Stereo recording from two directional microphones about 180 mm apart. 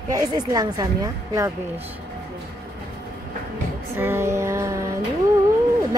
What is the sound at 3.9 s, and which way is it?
Music, 15° right (ahead or behind).